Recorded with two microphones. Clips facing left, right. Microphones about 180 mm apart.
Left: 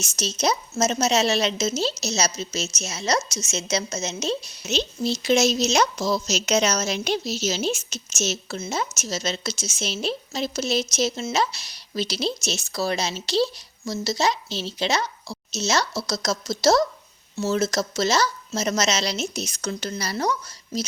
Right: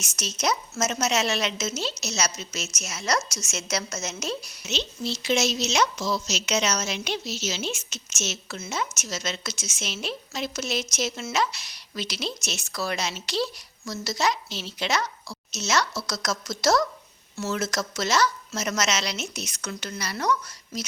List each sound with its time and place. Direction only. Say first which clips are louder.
0.0 s speech: left 4 dB; 30° left (ahead or behind)
4.7 s a woman's voice: left 5 dB; 40° left (ahead or behind)